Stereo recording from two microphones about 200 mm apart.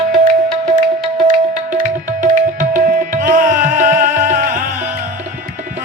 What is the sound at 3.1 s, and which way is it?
Music, 40° right (ahead or behind).